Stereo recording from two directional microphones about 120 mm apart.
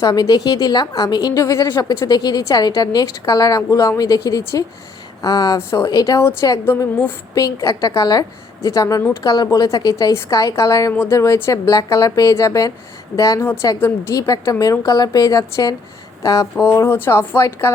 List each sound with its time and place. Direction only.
0.0 s a woman's voice: 35° left (ahead or behind)